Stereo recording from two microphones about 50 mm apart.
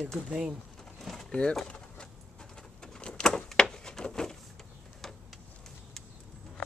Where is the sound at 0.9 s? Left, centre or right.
Centre.